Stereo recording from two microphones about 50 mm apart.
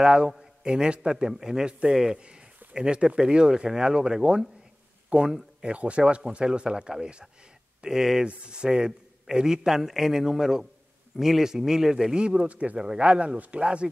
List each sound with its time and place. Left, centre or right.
0.0 s a man's voice: centre
12.7 s a man's voice: centre
13.0 s speech: right